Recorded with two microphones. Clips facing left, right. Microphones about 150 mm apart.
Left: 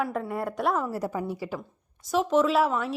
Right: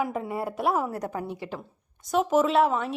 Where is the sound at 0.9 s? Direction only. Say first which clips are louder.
Left 2 dB; 5° left (ahead or behind).